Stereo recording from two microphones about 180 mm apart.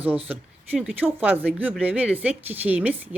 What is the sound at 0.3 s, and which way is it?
A woman's voice, 5° right (ahead or behind).